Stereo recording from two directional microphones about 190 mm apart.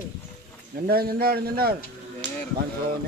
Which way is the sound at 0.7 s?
50° right (ahead or behind).